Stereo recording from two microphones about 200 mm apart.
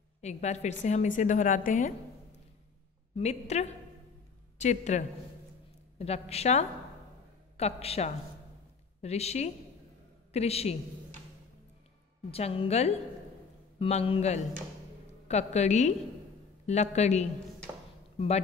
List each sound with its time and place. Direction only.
0.2 s a woman's voice: 35° left (ahead or behind)
3.2 s a woman's voice: 35° left (ahead or behind)
12.3 s a woman's voice: 30° left (ahead or behind)